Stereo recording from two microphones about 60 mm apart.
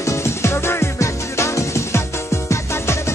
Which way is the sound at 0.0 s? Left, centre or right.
Left.